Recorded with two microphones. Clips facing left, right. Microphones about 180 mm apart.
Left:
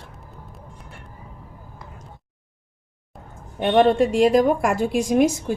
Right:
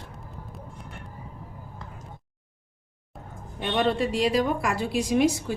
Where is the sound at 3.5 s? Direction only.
50° left (ahead or behind).